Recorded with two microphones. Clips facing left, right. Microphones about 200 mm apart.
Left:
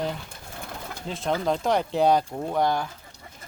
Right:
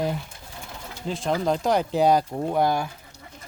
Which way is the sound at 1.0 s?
Centre (ahead or behind).